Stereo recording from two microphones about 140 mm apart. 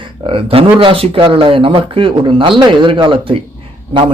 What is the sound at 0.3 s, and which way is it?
A man's voice, 40° right (ahead or behind).